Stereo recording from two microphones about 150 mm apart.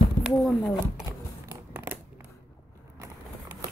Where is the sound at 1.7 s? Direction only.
15° right (ahead or behind).